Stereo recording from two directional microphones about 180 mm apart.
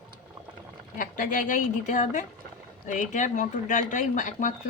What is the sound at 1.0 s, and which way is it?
Speech, 45° left (ahead or behind).